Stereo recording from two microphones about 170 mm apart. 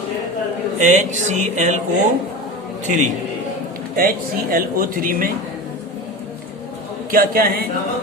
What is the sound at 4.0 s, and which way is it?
A man's voice, 55° right (ahead or behind).